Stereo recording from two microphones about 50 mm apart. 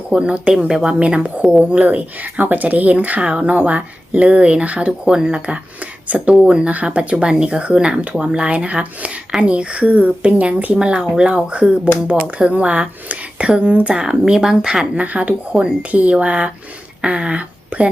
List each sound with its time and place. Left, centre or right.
0.1 s speech: right
0.9 s speech: right
4.9 s speech: centre; by 10.8 s right
10.8 s speech: right
14.9 s speech: right